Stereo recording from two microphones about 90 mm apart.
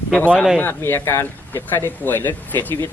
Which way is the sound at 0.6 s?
25° left (ahead or behind).